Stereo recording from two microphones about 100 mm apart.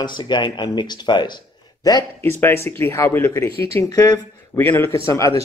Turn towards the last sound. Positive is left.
turn(degrees=30)  # may be behind; listen again after turning